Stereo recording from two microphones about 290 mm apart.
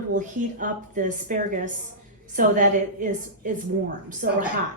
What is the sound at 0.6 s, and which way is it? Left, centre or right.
Speech, right.